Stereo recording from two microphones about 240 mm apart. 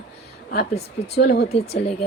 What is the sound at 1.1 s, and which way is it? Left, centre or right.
Speech, left.